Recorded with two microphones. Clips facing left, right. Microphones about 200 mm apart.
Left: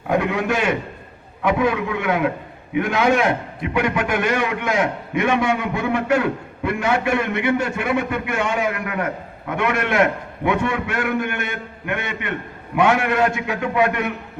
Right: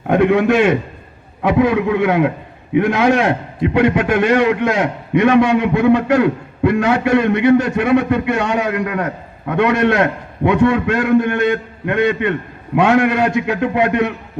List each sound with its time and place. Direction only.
0.1 s a man's voice: 25° right (ahead or behind)